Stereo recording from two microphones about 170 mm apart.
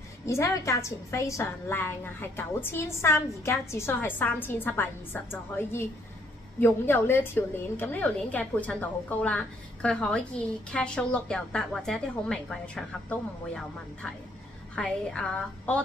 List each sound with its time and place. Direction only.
0.3 s a woman's voice: 15° left (ahead or behind)